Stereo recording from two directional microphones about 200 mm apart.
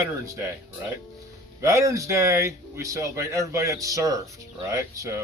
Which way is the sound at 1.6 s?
15° right (ahead or behind).